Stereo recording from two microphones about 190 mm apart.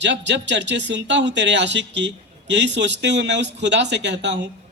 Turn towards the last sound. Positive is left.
turn(degrees=-65)  # may be behind; listen again after turning